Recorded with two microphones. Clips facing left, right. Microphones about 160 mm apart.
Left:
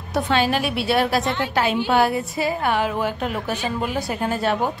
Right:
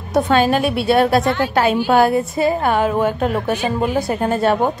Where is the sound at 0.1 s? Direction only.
45° right (ahead or behind).